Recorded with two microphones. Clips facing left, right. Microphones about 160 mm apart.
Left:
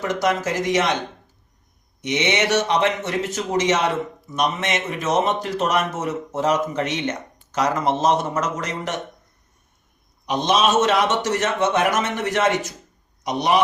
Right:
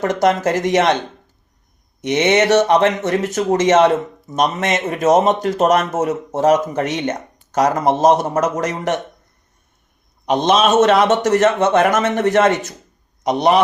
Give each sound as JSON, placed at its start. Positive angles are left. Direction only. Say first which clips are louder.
{"t": 0.0, "sound": "speech", "louder": "right 6 dB", "side_deg": -50}
{"t": 2.0, "sound": "speech", "louder": "right 7 dB", "side_deg": -50}
{"t": 10.2, "sound": "a man's voice", "louder": "right 5 dB", "side_deg": -55}